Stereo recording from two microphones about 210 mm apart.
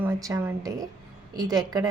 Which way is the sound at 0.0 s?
10° right (ahead or behind).